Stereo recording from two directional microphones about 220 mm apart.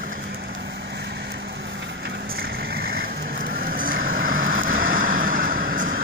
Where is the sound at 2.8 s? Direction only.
45° right (ahead or behind).